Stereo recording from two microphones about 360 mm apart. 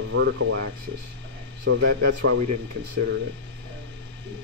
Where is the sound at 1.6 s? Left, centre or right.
Right.